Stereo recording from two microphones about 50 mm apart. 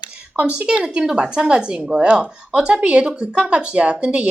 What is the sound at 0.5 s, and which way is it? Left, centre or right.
Speech, right.